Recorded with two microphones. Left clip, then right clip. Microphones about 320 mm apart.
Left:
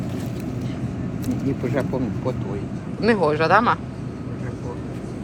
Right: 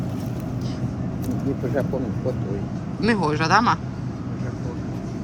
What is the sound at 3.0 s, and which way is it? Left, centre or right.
Speech, centre.